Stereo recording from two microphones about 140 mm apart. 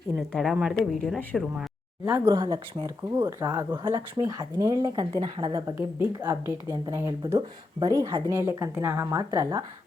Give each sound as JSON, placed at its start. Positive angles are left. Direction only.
{"t": 0.2, "sound": "speech", "side_deg": 0}
{"t": 2.0, "sound": "a woman's voice", "side_deg": -15}
{"t": 5.6, "sound": "a woman's voice", "side_deg": -15}